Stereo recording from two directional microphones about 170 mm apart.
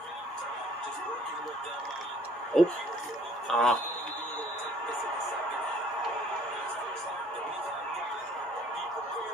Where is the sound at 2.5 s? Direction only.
Centre (ahead or behind).